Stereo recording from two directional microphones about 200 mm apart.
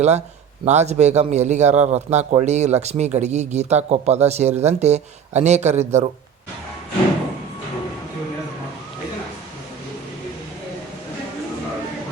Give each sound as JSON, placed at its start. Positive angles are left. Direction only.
{"t": 0.6, "sound": "a man's voice", "side_deg": -35}